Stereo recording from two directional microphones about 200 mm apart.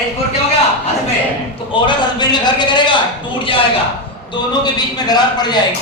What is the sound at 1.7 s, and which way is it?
A man's voice, 20° left (ahead or behind).